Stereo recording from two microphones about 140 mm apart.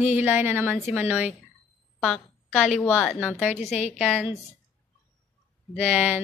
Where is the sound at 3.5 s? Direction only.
55° left (ahead or behind).